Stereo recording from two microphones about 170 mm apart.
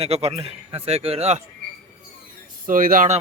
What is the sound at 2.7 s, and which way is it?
Speech, 55° right (ahead or behind).